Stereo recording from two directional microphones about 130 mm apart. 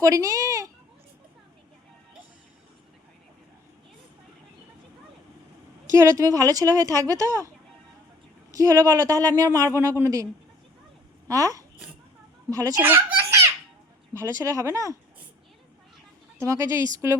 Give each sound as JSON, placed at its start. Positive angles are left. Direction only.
{"t": 0.0, "sound": "speech", "side_deg": -25}
{"t": 5.9, "sound": "speech", "side_deg": -20}
{"t": 8.5, "sound": "speech", "side_deg": -25}
{"t": 11.3, "sound": "speech", "side_deg": -25}
{"t": 12.8, "sound": "a child's voice", "side_deg": -15}
{"t": 16.5, "sound": "speech", "side_deg": -25}